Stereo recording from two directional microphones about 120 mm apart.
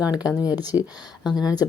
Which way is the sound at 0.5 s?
35° left (ahead or behind).